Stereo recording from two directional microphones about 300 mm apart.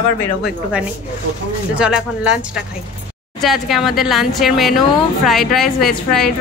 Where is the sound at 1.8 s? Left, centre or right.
Centre.